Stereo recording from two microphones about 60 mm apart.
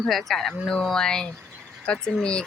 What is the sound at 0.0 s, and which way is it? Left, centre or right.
Speech, centre.